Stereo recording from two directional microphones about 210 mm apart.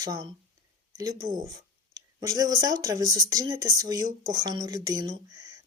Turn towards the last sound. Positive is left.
turn(degrees=-15)  # may be behind; listen again after turning